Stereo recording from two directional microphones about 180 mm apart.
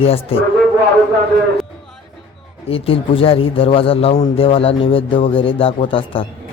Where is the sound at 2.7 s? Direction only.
30° left (ahead or behind).